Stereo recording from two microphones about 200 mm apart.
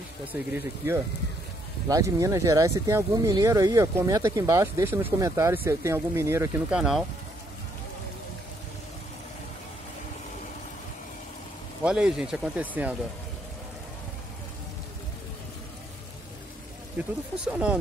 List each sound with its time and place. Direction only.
0.3 s speech: 10° right (ahead or behind)
6.8 s speech: centre (ahead or behind)
11.8 s speech: 5° right (ahead or behind)
17.0 s speech: 5° right (ahead or behind)